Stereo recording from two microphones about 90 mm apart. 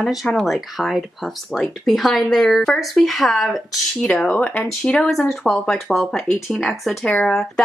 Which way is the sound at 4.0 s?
10° left (ahead or behind).